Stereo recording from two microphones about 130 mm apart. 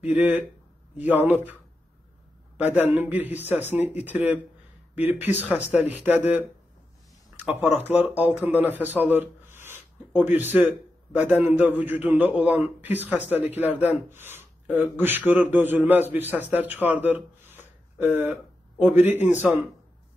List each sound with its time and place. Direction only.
0.0 s a man's voice: 10° right (ahead or behind)
7.4 s a man's voice: 15° right (ahead or behind)